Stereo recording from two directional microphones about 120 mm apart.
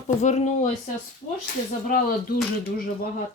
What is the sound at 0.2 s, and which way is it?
Speech, 70° left (ahead or behind).